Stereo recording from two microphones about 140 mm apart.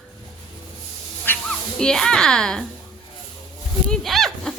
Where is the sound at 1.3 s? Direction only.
15° left (ahead or behind).